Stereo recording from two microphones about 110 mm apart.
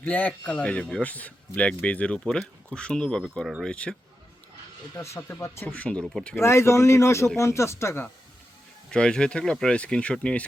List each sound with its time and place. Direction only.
0.0 s speech: 15° left (ahead or behind)
4.9 s speech: 25° left (ahead or behind)
5.6 s speech: 10° left (ahead or behind)
6.3 s speech: 25° left (ahead or behind)
8.9 s speech: 5° left (ahead or behind)